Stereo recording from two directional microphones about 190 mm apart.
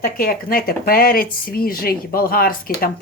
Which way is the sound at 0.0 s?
50° left (ahead or behind).